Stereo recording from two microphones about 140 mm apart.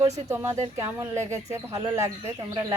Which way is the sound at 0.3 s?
20° right (ahead or behind).